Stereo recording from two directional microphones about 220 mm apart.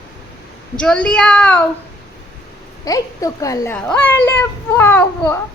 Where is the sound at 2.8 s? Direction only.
15° left (ahead or behind).